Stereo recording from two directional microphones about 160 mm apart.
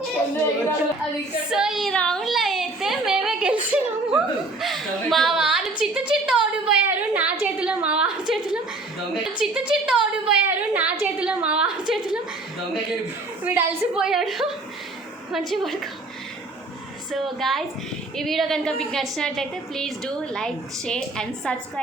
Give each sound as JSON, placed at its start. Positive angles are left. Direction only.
{"t": 1.5, "sound": "a woman's voice", "side_deg": -5}
{"t": 13.4, "sound": "a woman's voice", "side_deg": -10}
{"t": 17.1, "sound": "a woman's voice", "side_deg": 0}